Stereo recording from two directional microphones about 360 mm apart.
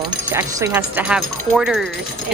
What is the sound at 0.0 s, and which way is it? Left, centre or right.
Speech, centre.